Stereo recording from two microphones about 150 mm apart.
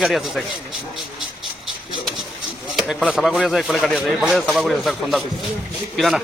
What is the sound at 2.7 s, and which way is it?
A man's voice, centre (ahead or behind).